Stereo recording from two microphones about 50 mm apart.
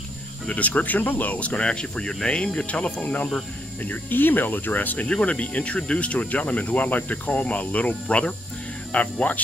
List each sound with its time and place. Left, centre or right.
0.5 s speech: left
3.8 s speech: left
5.0 s speech: left